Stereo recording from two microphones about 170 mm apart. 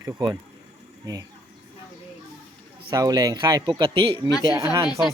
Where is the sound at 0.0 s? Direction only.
20° right (ahead or behind).